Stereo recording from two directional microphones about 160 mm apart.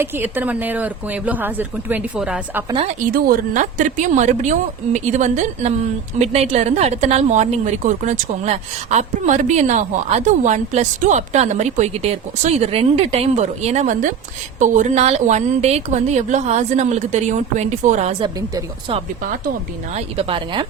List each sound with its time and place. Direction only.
0.0 s a woman's voice: 10° right (ahead or behind)
2.8 s a woman's voice: 60° right (ahead or behind)
18.2 s a woman's voice: 25° right (ahead or behind)
19.9 s speech: 40° right (ahead or behind)